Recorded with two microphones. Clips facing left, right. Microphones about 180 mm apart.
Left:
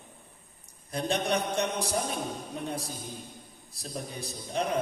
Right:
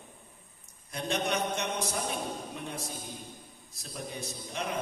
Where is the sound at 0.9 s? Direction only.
35° left (ahead or behind).